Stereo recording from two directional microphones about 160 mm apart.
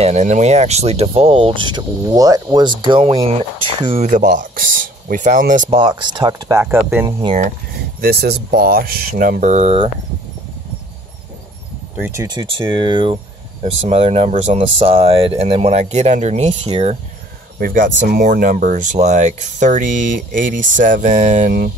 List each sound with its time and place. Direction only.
0.0 s speech: 45° right (ahead or behind)
4.1 s speech: 50° right (ahead or behind)
5.7 s speech: 30° right (ahead or behind); by 7.1 s 15° right (ahead or behind)
7.2 s speech: 40° right (ahead or behind)
8.0 s speech: 80° right
9.4 s speech: 45° right (ahead or behind)
12.1 s speech: 20° right (ahead or behind)
13.6 s speech: 40° right (ahead or behind)
17.6 s speech: 60° right (ahead or behind)